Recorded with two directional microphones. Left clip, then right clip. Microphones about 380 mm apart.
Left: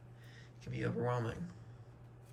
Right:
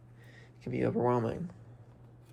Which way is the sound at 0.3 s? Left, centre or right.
Centre.